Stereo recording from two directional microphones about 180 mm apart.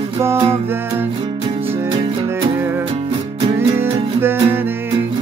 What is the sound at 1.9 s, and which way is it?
Music, 25° right (ahead or behind).